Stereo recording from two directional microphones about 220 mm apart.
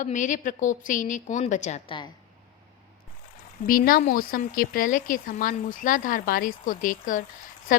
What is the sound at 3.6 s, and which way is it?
Speech, 40° left (ahead or behind).